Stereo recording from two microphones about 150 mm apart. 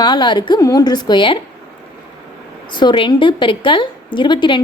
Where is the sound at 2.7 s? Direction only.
30° left (ahead or behind).